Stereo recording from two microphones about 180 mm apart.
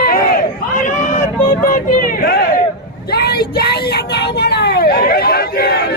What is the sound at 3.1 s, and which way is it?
Vehicle, 60° left (ahead or behind).